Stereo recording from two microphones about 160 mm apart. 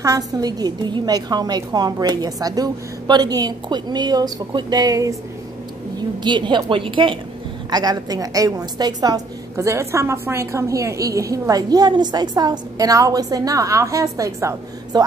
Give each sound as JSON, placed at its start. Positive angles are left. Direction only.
{"t": 0.0, "sound": "a woman's voice", "side_deg": -20}